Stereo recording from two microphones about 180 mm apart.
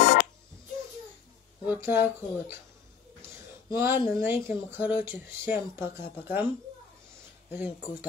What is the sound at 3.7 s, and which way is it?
Speech, 15° right (ahead or behind).